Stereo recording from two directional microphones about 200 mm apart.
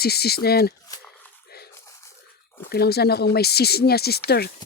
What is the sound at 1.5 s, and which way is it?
Dog, 50° left (ahead or behind).